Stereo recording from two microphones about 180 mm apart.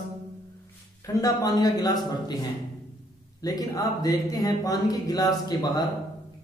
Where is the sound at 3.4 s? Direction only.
20° left (ahead or behind).